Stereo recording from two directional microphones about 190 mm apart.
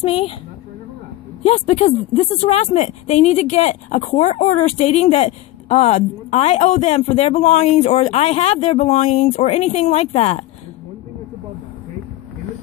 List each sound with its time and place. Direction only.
0.0 s a woman's voice: 30° left (ahead or behind)
1.4 s a woman's voice: 30° left (ahead or behind)